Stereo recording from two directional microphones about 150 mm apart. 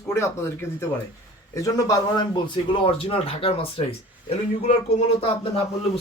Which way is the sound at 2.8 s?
40° left (ahead or behind).